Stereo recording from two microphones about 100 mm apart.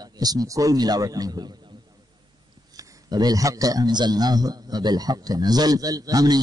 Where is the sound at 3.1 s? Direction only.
40° right (ahead or behind).